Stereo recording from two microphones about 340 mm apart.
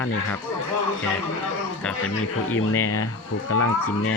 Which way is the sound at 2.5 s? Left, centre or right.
Left.